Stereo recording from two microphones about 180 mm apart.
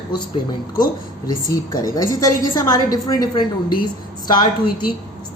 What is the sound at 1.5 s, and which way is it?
A woman's voice, 20° left (ahead or behind).